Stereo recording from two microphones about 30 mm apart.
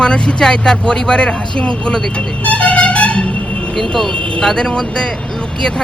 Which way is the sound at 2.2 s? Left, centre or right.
Left.